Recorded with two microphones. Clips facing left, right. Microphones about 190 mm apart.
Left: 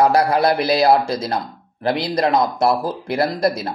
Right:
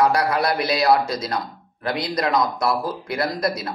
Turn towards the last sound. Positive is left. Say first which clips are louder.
# left 5 dB
turn(degrees=30)  # may be behind; listen again after turning